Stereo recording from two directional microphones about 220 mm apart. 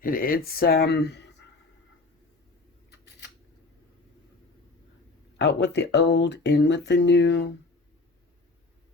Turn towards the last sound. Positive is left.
turn(degrees=55)  # may be behind; listen again after turning